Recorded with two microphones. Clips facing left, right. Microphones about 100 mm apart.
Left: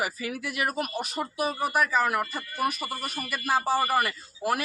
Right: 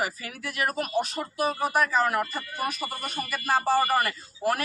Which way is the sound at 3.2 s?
35° right (ahead or behind).